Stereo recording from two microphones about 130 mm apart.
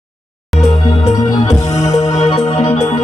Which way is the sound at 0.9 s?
25° left (ahead or behind).